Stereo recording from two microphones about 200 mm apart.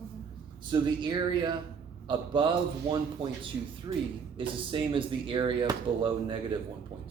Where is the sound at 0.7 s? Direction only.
20° right (ahead or behind).